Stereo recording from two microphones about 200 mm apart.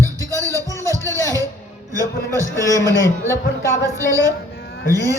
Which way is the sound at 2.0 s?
15° right (ahead or behind).